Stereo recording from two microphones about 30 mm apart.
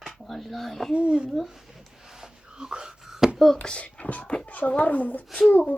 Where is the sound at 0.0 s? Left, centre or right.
Centre.